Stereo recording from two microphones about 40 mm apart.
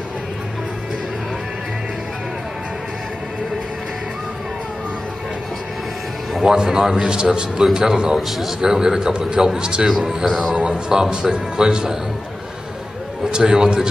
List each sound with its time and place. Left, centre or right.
6.5 s a man's voice: centre
8.3 s a man's voice: centre
8.5 s a man's voice: centre
9.8 s a man's voice: centre
10.9 s a man's voice: centre
13.2 s a man's voice: centre